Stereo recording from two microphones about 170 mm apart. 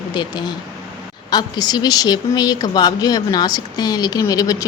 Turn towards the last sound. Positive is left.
turn(degrees=20)  # may be behind; listen again after turning